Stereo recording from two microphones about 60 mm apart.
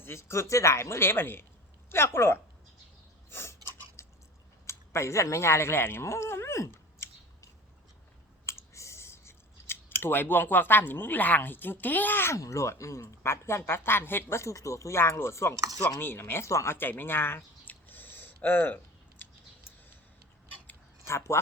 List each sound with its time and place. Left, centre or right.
0.0 s speech: left
3.2 s chewing: left
4.6 s a sound: left
8.4 s clicking: left
12.3 s speech: left
13.2 s speech: left
14.5 s speech: left
16.0 s speech: left
16.5 s speech: left
16.7 s a sound: left
21.0 s speech: left